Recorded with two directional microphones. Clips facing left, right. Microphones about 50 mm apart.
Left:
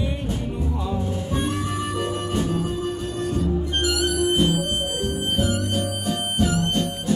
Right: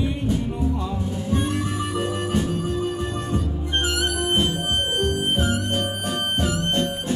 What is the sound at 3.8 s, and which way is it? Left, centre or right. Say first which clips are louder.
Music: right 1 dB; right.